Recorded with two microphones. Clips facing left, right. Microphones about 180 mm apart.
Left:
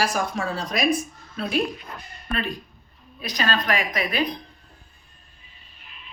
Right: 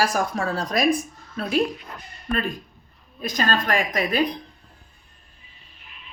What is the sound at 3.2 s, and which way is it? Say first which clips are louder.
A man's voice: right 1 dB; 45° right (ahead or behind).